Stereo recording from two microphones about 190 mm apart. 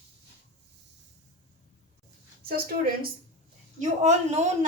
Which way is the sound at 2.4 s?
50° right (ahead or behind).